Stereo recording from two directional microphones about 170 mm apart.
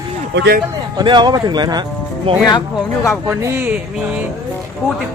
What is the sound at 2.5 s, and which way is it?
Speech, 20° left (ahead or behind).